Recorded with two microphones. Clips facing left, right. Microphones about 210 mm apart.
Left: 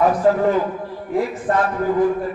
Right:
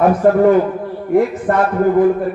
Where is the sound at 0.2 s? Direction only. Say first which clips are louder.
Right 6 dB; 55° right (ahead or behind).